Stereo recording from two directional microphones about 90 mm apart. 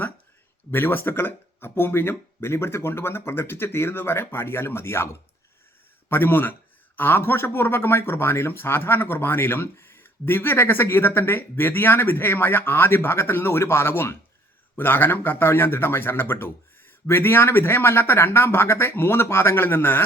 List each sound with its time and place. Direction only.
0.7 s speech: 25° left (ahead or behind)
6.1 s speech: 25° left (ahead or behind)